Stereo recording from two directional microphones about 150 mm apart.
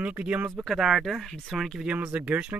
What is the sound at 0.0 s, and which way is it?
Speech, 10° right (ahead or behind).